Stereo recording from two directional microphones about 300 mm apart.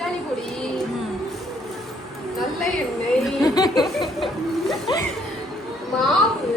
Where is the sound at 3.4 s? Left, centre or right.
Centre.